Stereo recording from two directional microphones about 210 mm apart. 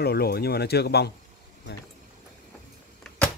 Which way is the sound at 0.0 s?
50° left (ahead or behind).